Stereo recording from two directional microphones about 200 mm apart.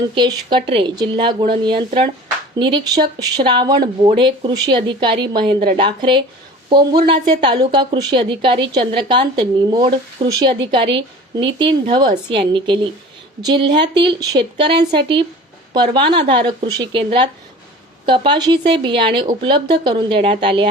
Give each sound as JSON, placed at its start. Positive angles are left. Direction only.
{"t": 0.1, "sound": "a woman's voice", "side_deg": -25}